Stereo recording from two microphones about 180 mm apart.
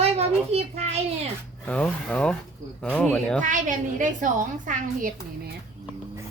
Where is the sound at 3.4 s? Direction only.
45° right (ahead or behind).